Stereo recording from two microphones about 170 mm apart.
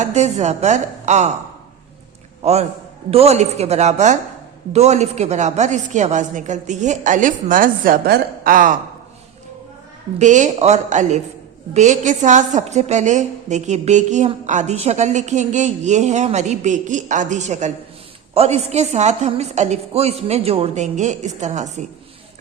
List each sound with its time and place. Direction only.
0.0 s a woman's voice: 45° right (ahead or behind)
2.4 s a man's voice: 40° right (ahead or behind)
10.2 s a woman's voice: 45° right (ahead or behind)